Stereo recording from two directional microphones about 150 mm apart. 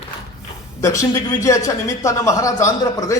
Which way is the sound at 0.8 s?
20° left (ahead or behind).